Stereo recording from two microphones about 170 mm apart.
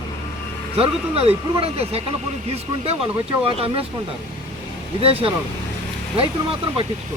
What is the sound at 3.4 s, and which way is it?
Speech, 35° right (ahead or behind).